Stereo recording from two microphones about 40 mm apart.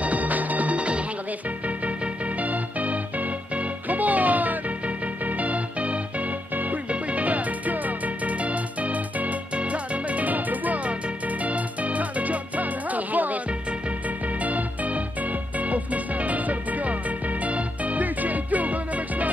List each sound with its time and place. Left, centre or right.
0.0 s music: right
2.4 s music: right
14.4 s music: right